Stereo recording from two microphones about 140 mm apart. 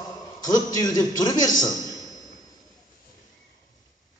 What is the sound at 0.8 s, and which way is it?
Speech, 30° left (ahead or behind).